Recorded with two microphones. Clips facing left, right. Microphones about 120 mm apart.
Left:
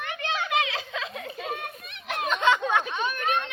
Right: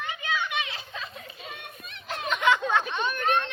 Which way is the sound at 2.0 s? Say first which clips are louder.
Left 3 dB; 60° left (ahead or behind).